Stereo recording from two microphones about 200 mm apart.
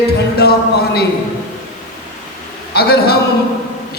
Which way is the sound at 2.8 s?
55° left (ahead or behind).